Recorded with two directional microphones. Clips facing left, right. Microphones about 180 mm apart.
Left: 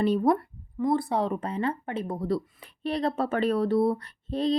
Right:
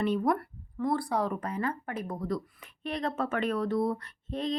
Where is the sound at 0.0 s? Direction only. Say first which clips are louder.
Left 4 dB; 30° left (ahead or behind).